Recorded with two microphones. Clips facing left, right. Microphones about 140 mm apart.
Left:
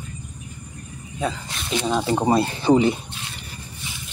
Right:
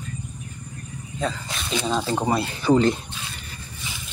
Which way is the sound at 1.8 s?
15° left (ahead or behind).